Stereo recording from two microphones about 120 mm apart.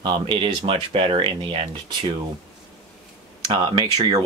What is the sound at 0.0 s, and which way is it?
Speech, 45° right (ahead or behind).